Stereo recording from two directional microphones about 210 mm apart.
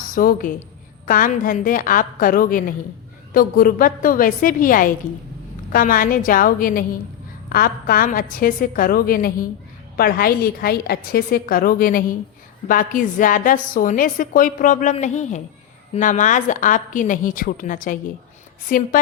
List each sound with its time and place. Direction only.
0.1 s a woman's voice: 40° left (ahead or behind)